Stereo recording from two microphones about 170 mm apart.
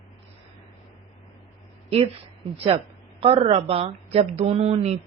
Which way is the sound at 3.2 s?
35° right (ahead or behind).